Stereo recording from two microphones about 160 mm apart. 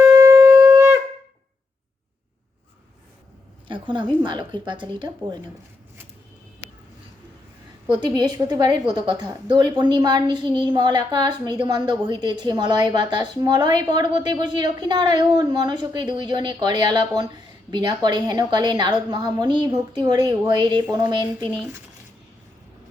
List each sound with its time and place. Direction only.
0.2 s shofar: 20° right (ahead or behind)
3.7 s a woman's voice: 30° right (ahead or behind)
7.9 s a woman's voice: 25° right (ahead or behind)